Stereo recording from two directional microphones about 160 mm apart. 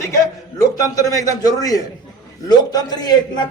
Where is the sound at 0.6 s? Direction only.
20° left (ahead or behind).